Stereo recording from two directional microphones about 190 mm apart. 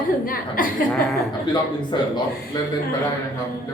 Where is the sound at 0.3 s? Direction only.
45° left (ahead or behind).